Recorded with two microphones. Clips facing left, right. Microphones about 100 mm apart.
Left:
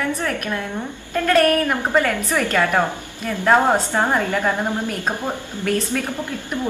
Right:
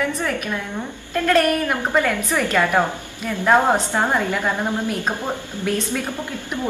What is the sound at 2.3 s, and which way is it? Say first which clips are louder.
Speech: even; 10° right (ahead or behind).